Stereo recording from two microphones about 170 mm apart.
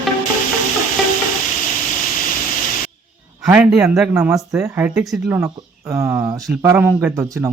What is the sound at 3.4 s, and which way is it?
Speech, 10° right (ahead or behind).